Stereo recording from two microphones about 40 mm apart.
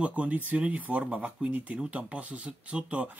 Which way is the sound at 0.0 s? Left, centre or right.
Right.